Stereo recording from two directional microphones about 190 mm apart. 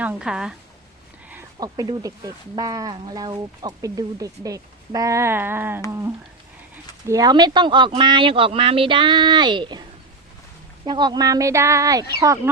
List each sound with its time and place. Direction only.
0.0 s a woman's voice: 5° right (ahead or behind)
1.5 s speech: 20° right (ahead or behind)
7.1 s speech: 20° right (ahead or behind)
10.8 s speech: 25° right (ahead or behind)